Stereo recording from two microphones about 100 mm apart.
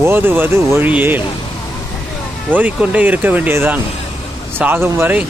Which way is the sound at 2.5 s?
15° right (ahead or behind).